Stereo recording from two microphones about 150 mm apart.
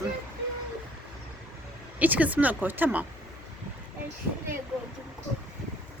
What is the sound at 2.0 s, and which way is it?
Speech, 10° right (ahead or behind).